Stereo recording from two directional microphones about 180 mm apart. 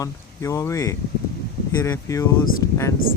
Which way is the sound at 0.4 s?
15° left (ahead or behind).